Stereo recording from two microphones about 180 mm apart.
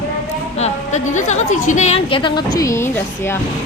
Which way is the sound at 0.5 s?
40° left (ahead or behind).